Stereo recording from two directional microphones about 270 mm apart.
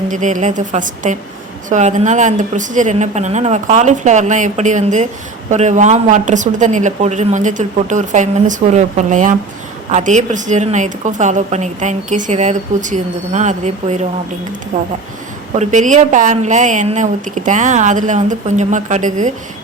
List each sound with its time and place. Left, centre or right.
0.1 s a woman's voice: right